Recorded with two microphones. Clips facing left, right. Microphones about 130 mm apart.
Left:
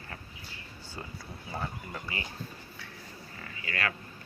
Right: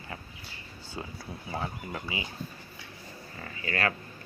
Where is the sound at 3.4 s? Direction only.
35° right (ahead or behind).